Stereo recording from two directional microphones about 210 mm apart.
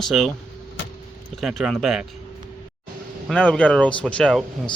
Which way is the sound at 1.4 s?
Centre (ahead or behind).